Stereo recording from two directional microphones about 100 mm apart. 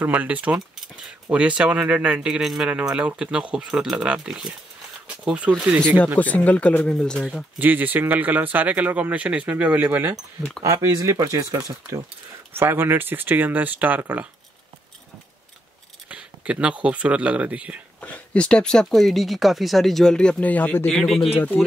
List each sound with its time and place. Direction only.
0.0 s speech: 15° right (ahead or behind)
5.0 s a sound: 10° right (ahead or behind)
6.1 s speech: 15° left (ahead or behind)
7.5 s speech: 20° right (ahead or behind)
10.6 s speech: 35° right (ahead or behind); by 14.2 s 15° right (ahead or behind)
16.1 s speech: 10° right (ahead or behind)
18.0 s speech: 15° left (ahead or behind)
20.9 s speech: 5° left (ahead or behind)